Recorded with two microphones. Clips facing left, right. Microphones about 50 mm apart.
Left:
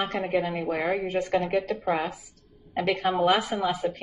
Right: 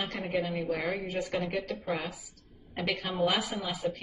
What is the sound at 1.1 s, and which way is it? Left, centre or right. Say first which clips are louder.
Speech: left 7 dB; left.